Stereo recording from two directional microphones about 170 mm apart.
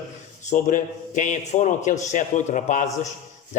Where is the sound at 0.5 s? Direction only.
50° left (ahead or behind).